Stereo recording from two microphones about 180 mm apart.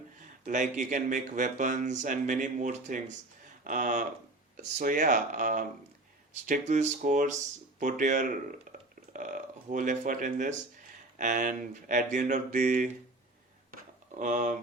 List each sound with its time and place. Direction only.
0.4 s speech: 45° right (ahead or behind)
14.2 s speech: 45° right (ahead or behind)